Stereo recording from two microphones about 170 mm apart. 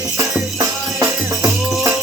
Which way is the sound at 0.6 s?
15° right (ahead or behind).